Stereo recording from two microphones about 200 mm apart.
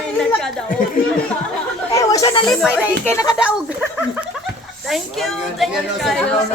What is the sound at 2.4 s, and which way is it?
Speech, centre (ahead or behind).